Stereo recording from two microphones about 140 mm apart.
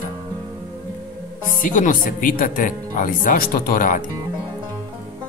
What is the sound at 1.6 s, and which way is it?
Speech, 70° left (ahead or behind).